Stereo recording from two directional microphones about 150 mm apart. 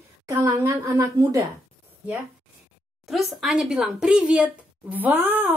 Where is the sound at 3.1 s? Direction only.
Centre (ahead or behind).